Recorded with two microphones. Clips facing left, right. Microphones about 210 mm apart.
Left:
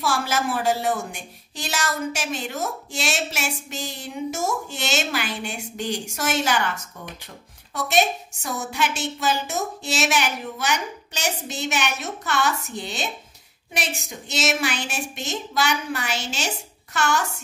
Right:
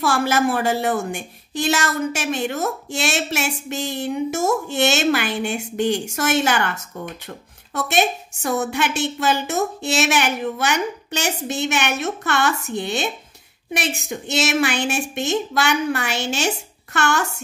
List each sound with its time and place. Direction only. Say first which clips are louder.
0.0 s a woman's voice: right 5 dB; 60° right (ahead or behind)
7.7 s a woman's voice: right 1 dB; 60° right (ahead or behind)